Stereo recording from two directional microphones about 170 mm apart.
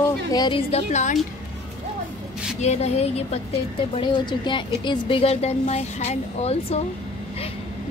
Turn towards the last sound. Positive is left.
turn(degrees=40)  # may be behind; listen again after turning